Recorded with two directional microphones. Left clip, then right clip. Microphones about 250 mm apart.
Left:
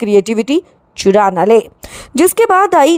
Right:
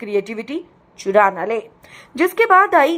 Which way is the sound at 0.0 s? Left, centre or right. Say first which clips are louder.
Left 10 dB; left.